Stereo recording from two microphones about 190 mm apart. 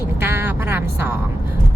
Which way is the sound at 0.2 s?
10° right (ahead or behind).